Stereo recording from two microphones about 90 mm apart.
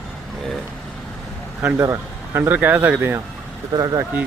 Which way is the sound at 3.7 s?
45° right (ahead or behind).